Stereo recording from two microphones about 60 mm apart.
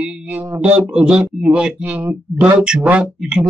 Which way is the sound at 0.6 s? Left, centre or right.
Centre.